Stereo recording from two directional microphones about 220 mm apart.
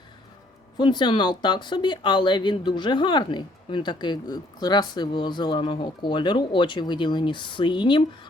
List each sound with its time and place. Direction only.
0.8 s speech: 20° left (ahead or behind)